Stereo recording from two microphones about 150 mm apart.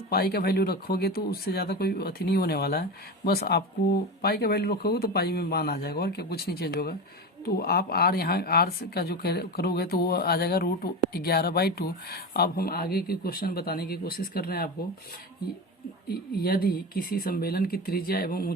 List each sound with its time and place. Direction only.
0.1 s speech: 90° left
16.0 s speech: 90° left